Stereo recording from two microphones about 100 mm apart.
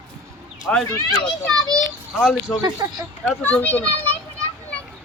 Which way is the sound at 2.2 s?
5° right (ahead or behind).